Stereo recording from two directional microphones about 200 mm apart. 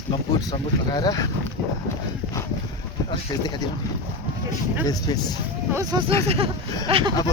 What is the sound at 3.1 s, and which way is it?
Speech, 20° left (ahead or behind).